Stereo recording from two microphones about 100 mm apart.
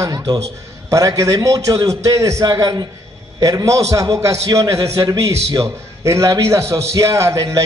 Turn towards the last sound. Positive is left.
turn(degrees=-30)  # may be behind; listen again after turning